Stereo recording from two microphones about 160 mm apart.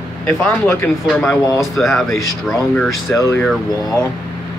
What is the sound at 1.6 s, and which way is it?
Speech, centre (ahead or behind).